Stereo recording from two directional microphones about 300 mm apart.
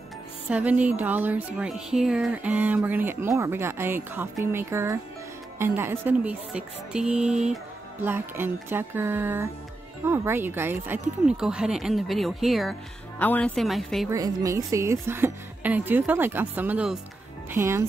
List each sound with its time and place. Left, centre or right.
0.5 s a woman's voice: centre
14.1 s a woman's voice: centre